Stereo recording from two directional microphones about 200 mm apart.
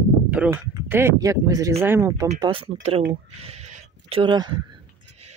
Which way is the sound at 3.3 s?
30° right (ahead or behind).